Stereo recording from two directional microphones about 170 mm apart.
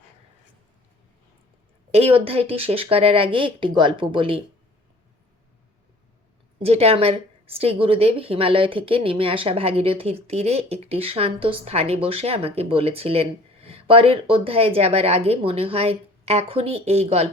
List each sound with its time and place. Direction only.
1.9 s speech: 35° right (ahead or behind)
6.6 s speech: 35° right (ahead or behind)